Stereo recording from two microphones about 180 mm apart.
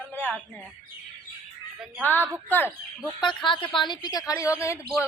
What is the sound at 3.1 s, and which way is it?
Speech, 25° left (ahead or behind).